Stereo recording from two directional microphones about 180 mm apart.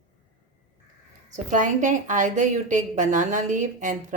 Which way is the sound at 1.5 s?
45° right (ahead or behind).